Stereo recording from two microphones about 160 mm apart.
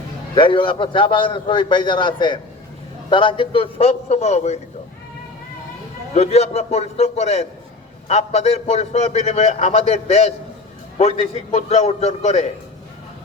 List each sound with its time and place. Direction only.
0.3 s a man's voice: 30° left (ahead or behind)
6.1 s a man's voice: 40° left (ahead or behind)